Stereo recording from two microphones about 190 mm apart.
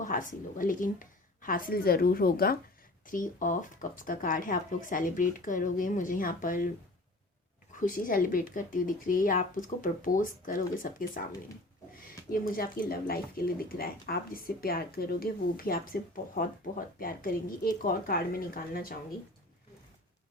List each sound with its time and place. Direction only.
0.0 s speech: 45° left (ahead or behind)
7.8 s speech: 45° left (ahead or behind)
12.3 s speech: 50° left (ahead or behind)